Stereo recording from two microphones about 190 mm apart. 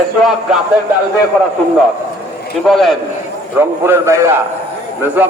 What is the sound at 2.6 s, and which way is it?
Speech, centre (ahead or behind).